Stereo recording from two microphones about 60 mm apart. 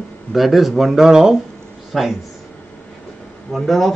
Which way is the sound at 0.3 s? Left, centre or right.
Centre.